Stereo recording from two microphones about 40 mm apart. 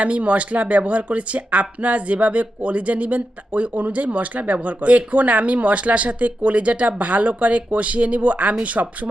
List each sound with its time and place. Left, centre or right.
0.0 s speech: right